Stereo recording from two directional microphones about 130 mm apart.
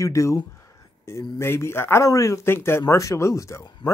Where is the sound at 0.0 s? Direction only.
25° left (ahead or behind).